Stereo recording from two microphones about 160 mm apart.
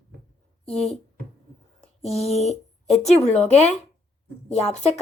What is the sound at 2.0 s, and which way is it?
A woman's voice, 40° left (ahead or behind).